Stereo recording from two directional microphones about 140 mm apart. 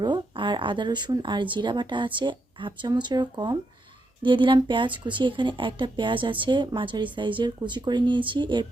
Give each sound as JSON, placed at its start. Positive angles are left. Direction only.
{"t": 0.0, "sound": "a woman's voice", "side_deg": -35}